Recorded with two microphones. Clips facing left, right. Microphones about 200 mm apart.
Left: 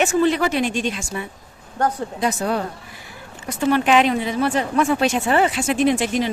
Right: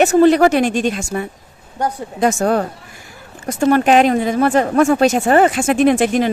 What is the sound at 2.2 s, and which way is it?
A woman's voice, 50° right (ahead or behind).